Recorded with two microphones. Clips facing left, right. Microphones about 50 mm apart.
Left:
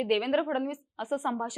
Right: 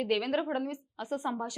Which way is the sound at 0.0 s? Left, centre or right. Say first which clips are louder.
Left 3 dB; centre.